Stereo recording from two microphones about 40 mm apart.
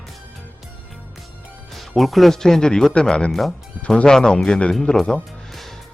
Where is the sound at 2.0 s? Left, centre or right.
Centre.